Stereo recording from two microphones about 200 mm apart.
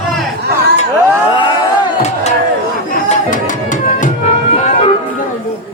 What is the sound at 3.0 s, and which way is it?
Music, 40° left (ahead or behind).